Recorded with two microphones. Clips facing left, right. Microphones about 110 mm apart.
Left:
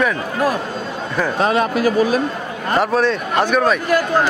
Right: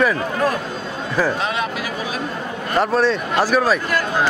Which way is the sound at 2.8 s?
Centre (ahead or behind).